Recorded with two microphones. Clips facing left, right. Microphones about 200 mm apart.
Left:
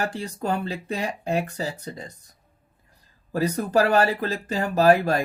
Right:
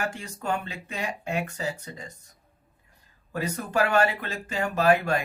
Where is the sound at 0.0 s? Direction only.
35° left (ahead or behind).